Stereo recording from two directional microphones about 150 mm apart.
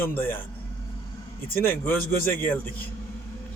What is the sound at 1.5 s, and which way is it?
Speech, 15° left (ahead or behind).